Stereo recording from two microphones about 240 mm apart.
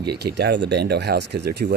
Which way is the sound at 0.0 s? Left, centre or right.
Right.